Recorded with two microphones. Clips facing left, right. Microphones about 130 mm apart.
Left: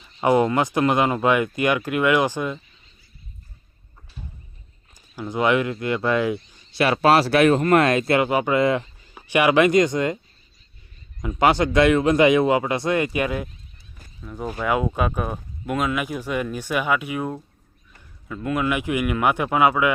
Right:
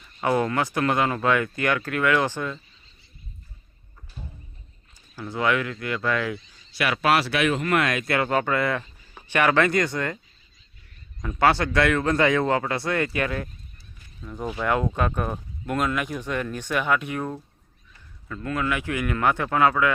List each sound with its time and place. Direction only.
0.0 s speech: 20° left (ahead or behind)
5.1 s speech: 15° left (ahead or behind)
8.2 s speech: 15° left (ahead or behind)
11.2 s speech: 15° left (ahead or behind)
14.2 s speech: 5° left (ahead or behind)